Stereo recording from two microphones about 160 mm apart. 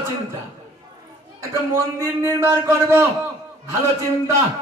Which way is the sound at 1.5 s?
20° right (ahead or behind).